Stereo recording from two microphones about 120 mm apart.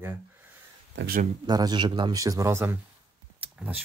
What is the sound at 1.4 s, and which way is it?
Speech, 35° right (ahead or behind).